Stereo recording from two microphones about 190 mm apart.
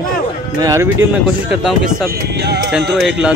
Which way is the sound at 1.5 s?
5° right (ahead or behind).